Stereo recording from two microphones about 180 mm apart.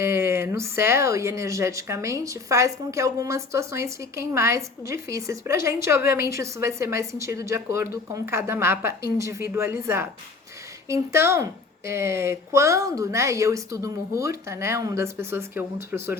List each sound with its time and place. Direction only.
0.0 s speech: 15° right (ahead or behind)